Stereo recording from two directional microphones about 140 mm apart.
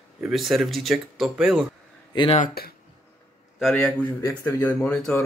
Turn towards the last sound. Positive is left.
turn(degrees=5)  # may be behind; listen again after turning